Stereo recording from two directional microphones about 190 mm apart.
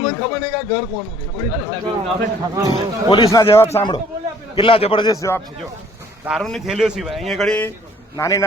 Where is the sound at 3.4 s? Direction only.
15° left (ahead or behind).